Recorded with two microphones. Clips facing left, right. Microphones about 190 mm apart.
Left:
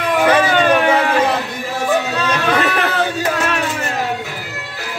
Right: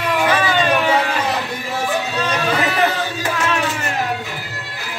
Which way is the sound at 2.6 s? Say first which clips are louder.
Even; 65° left (ahead or behind).